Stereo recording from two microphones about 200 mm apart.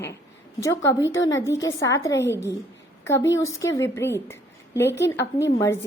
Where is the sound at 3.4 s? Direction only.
15° left (ahead or behind).